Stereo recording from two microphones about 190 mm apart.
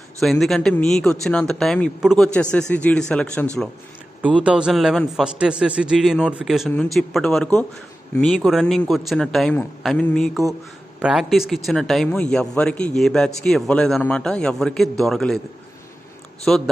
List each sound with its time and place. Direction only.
0.2 s a man's voice: centre (ahead or behind)
4.2 s a man's voice: 5° right (ahead or behind)
16.5 s a man's voice: 5° left (ahead or behind)